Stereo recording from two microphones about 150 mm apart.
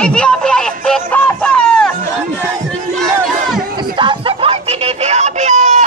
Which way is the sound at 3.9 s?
35° right (ahead or behind).